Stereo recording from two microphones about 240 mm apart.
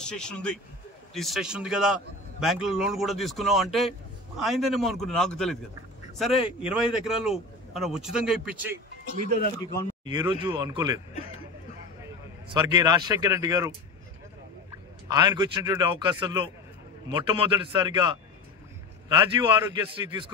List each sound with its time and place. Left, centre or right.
0.0 s speech: centre
10.0 s a man's voice: centre
12.4 s a man's voice: centre
15.0 s a man's voice: centre